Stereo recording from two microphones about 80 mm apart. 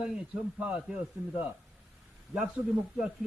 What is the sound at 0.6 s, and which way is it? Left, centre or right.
A man's voice, centre.